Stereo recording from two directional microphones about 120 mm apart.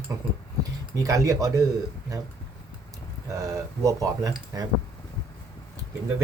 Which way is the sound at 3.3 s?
25° right (ahead or behind).